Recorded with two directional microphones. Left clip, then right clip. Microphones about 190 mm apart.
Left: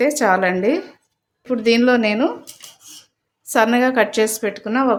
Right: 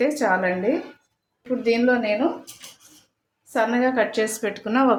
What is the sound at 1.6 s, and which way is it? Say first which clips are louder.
Speech: left 5 dB; 45° left (ahead or behind).